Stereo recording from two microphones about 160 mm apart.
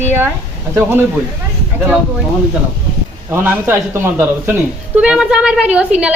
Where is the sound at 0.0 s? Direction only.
15° right (ahead or behind).